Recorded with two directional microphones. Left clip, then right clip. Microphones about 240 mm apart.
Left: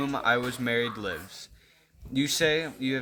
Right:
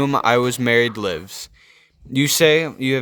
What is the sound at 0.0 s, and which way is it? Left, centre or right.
Speech, right.